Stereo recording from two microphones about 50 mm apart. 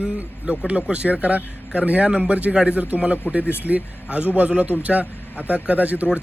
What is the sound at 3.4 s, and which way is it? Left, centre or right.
Speech, left.